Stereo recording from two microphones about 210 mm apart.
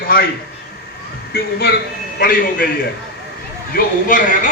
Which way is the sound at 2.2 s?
40° left (ahead or behind).